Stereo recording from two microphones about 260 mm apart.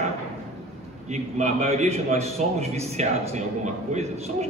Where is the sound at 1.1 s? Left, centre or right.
Right.